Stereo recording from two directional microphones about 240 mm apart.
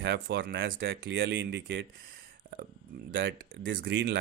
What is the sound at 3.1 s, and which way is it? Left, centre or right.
Speech, right.